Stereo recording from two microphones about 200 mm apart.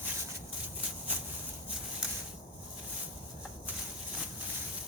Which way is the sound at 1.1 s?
10° right (ahead or behind).